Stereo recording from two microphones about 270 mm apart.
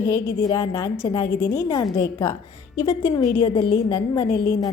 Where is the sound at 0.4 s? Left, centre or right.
Centre.